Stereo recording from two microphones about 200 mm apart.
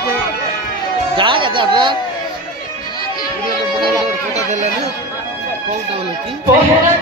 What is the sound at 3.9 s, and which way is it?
Music, 30° right (ahead or behind).